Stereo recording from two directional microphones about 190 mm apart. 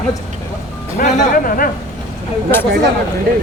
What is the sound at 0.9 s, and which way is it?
Speech, 45° left (ahead or behind).